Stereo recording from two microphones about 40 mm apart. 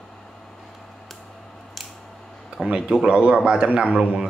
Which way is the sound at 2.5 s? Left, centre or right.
Right.